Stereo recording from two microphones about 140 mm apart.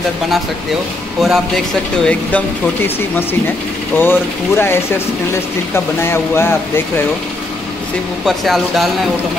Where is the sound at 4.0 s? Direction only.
15° left (ahead or behind).